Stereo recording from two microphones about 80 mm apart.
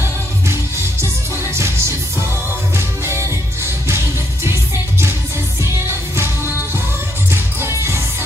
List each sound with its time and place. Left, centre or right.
1.5 s music: right
3.1 s music: right